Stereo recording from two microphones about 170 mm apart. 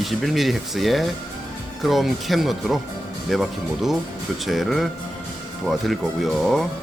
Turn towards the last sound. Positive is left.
turn(degrees=0)  # may be behind; listen again after turning